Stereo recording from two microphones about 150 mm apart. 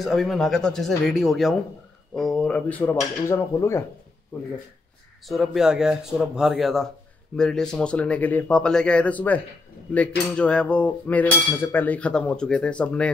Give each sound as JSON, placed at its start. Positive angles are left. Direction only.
{"t": 0.0, "sound": "speech", "side_deg": 0}
{"t": 2.1, "sound": "cutlery", "side_deg": 0}
{"t": 5.3, "sound": "speech", "side_deg": 0}
{"t": 7.3, "sound": "cutlery", "side_deg": 5}